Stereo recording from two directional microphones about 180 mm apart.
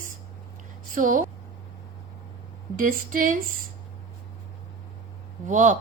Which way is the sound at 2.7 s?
50° right (ahead or behind).